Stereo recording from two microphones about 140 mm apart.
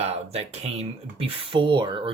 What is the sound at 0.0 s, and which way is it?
Speech, 50° right (ahead or behind).